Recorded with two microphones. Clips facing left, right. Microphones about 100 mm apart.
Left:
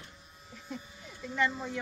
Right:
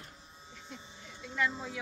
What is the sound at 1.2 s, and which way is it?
Speech, 5° left (ahead or behind).